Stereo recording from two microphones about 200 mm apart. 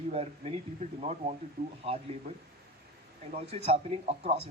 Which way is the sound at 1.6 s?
50° right (ahead or behind).